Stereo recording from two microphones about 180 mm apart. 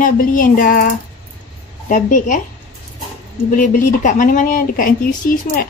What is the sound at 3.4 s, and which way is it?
Speech, 45° left (ahead or behind).